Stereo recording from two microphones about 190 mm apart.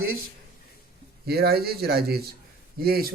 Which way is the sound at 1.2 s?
55° right (ahead or behind).